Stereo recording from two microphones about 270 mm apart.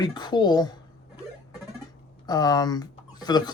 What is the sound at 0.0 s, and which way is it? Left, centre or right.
Speech, centre.